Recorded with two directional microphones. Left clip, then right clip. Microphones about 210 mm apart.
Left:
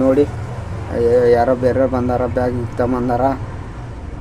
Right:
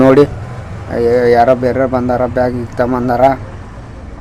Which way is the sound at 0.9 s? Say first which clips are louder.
Right 3 dB; 25° right (ahead or behind).